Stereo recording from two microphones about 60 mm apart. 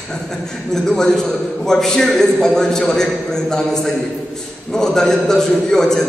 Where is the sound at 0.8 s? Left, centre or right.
Centre.